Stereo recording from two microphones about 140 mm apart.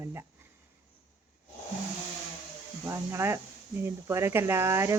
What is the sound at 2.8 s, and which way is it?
Speech, 20° right (ahead or behind).